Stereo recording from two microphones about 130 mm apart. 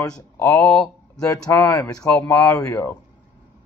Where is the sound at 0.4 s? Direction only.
15° left (ahead or behind).